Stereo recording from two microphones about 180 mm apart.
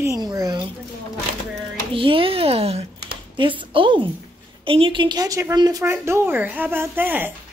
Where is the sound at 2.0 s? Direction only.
30° right (ahead or behind); by 7.3 s 10° right (ahead or behind).